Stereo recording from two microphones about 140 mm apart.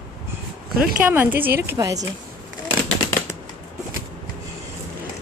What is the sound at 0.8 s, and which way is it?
Speech, 10° right (ahead or behind).